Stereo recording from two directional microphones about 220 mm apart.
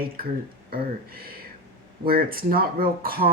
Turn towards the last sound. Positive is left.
turn(degrees=-40)  # may be behind; listen again after turning